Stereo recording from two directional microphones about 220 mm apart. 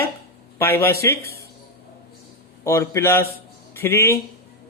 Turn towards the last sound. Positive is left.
turn(degrees=10)  # may be behind; listen again after turning